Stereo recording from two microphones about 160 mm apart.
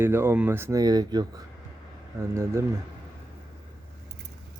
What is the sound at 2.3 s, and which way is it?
Speech, 15° right (ahead or behind).